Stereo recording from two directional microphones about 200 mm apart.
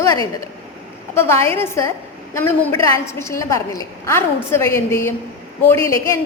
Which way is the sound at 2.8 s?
15° left (ahead or behind).